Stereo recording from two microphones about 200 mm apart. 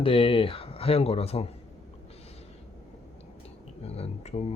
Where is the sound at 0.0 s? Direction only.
25° left (ahead or behind).